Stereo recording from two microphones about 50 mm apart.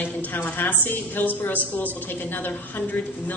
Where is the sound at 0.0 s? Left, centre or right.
Left.